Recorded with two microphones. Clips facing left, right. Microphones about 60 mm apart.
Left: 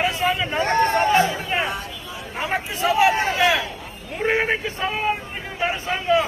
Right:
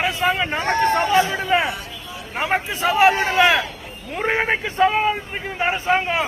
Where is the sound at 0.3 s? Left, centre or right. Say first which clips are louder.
Right 2 dB; right.